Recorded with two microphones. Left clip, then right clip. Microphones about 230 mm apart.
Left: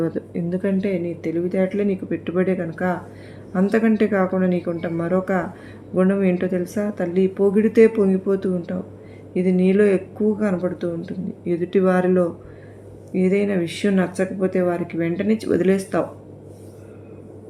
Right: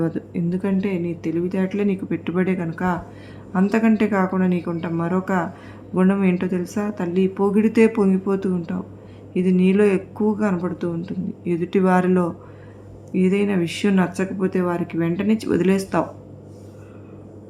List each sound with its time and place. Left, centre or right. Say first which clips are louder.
0.0 s speech: left 1 dB; centre